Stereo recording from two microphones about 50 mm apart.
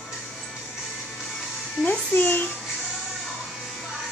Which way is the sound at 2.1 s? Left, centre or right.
Left.